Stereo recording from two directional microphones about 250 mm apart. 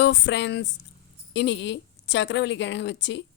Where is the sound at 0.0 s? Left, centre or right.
Left.